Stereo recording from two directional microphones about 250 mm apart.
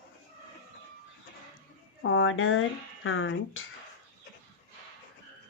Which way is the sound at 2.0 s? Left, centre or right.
Left.